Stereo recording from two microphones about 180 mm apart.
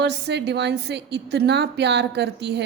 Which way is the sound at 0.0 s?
70° right (ahead or behind).